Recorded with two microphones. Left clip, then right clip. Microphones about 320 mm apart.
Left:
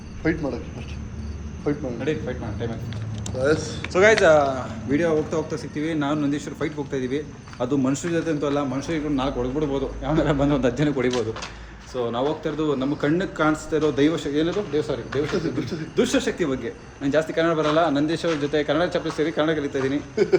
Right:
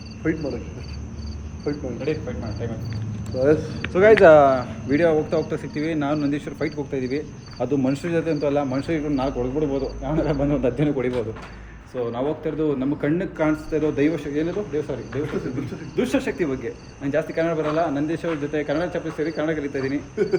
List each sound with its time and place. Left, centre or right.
3.4 s speech: right
3.8 s a man's voice: centre
4.2 s speech: right
4.9 s a man's voice: centre